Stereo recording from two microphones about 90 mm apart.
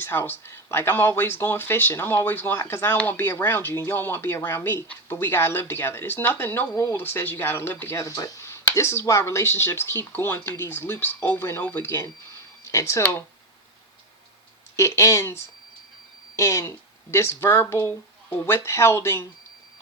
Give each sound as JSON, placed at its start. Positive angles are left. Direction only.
{"t": 0.0, "sound": "speech", "side_deg": 25}
{"t": 14.8, "sound": "speech", "side_deg": 35}